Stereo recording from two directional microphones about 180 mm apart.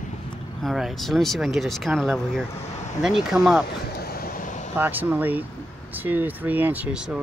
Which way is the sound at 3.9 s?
55° left (ahead or behind).